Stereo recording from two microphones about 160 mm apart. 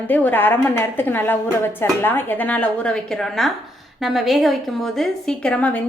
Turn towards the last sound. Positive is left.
turn(degrees=10)  # may be behind; listen again after turning